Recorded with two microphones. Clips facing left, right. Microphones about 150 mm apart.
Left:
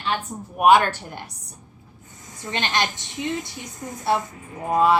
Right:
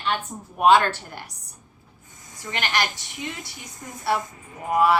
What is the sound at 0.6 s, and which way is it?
Speech, 15° left (ahead or behind).